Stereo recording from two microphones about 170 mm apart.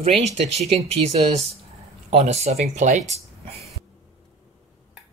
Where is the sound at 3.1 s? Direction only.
35° right (ahead or behind).